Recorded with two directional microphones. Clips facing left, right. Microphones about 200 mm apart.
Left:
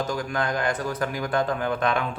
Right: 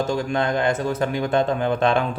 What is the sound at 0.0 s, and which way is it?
A man's voice, 25° right (ahead or behind).